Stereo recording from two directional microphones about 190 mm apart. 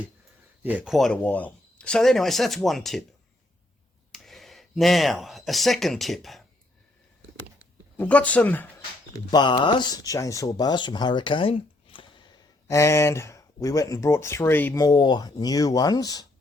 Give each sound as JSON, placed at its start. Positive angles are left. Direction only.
{"t": 0.6, "sound": "speech", "side_deg": -10}
{"t": 4.1, "sound": "speech", "side_deg": 0}
{"t": 7.9, "sound": "speech", "side_deg": 5}
{"t": 9.3, "sound": "speech", "side_deg": 25}
{"t": 12.6, "sound": "speech", "side_deg": 15}